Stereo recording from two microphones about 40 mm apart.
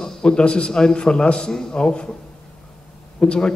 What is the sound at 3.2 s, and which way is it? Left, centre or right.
Speech, left.